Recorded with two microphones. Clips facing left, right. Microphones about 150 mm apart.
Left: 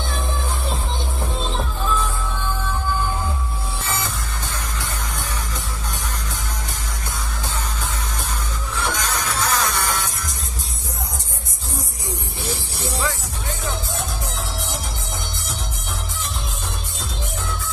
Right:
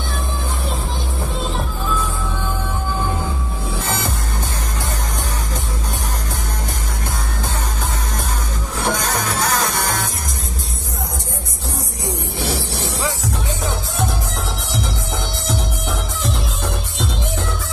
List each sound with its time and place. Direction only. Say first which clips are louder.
8.8 s music: right 5 dB; 50° right (ahead or behind)
12.4 s music: right 6 dB; 80° right